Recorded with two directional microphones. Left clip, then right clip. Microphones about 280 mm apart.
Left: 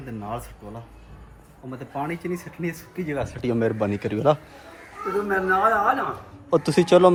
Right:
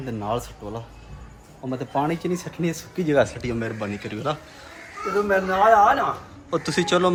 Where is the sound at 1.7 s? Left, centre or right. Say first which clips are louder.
Right 6 dB; centre.